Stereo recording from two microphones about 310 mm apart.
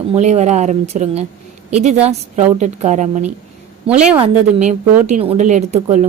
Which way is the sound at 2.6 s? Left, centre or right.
Right.